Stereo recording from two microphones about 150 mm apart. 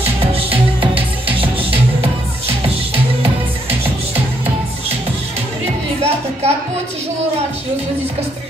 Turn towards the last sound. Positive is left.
turn(degrees=-45)  # may be behind; listen again after turning